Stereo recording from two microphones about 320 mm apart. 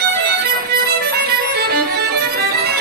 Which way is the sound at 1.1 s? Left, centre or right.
Right.